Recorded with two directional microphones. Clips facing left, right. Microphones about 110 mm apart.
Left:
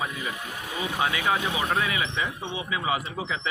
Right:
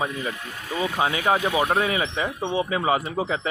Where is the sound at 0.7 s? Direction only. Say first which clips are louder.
Right 6 dB; 15° left (ahead or behind).